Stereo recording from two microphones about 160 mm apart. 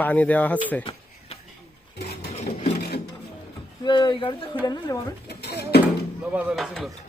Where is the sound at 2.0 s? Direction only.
85° left.